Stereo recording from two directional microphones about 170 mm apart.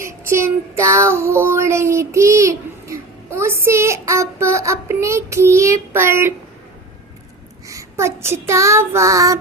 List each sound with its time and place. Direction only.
0.0 s child singing: 15° right (ahead or behind)
7.7 s child singing: 15° right (ahead or behind)